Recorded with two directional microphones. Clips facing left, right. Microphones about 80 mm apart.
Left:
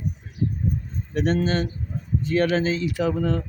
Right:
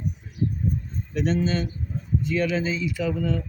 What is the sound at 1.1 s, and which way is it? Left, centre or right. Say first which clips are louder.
Speech: left 2 dB; left.